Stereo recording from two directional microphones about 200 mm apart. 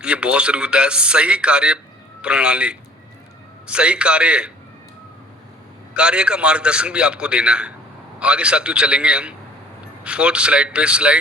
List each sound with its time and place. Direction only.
0.0 s speech: 5° right (ahead or behind)
5.9 s speech: 5° right (ahead or behind)